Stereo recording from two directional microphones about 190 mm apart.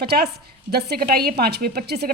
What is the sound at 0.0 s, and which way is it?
A woman's voice, 55° right (ahead or behind).